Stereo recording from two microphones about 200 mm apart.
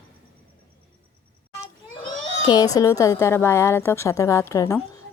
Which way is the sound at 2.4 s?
20° left (ahead or behind).